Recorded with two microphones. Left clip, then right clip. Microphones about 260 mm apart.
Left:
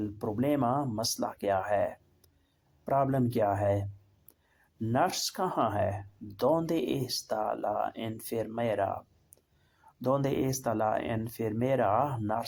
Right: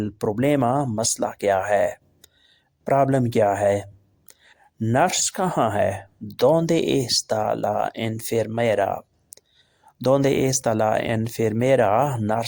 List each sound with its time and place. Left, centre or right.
0.0 s speech: right